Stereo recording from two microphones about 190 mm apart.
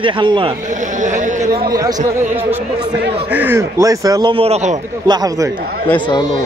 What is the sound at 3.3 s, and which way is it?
Speech, 10° right (ahead or behind).